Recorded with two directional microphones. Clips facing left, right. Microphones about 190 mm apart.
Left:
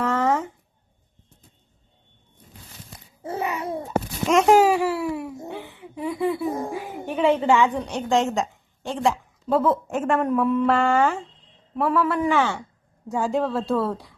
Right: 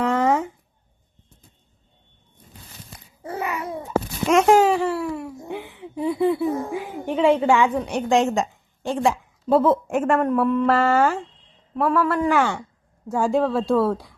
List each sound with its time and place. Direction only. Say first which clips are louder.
0.0 s a sound: right 2 dB; 15° right (ahead or behind)
3.2 s babbling: left 1 dB; 25° left (ahead or behind)
4.3 s babbling: right 1 dB; centre (ahead or behind)
5.5 s a sound: right 3 dB; 15° right (ahead or behind)
6.4 s speech: right 3 dB; 10° left (ahead or behind)
7.0 s a woman's voice: right 2 dB; 15° right (ahead or behind)
12.3 s a woman's voice: right 1 dB; 10° right (ahead or behind)